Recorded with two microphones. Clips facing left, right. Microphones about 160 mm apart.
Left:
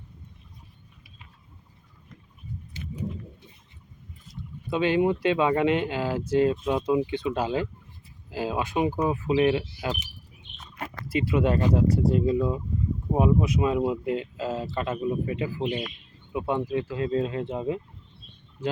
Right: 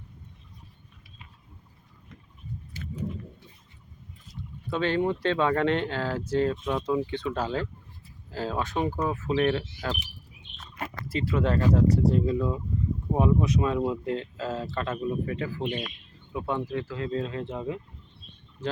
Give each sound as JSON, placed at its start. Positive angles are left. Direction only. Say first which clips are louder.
{"t": 2.8, "sound": "a sound", "louder": "left 1 dB", "side_deg": 20}
{"t": 4.7, "sound": "speech", "louder": "left 3 dB", "side_deg": 15}
{"t": 11.1, "sound": "speech", "louder": "left 3 dB", "side_deg": 15}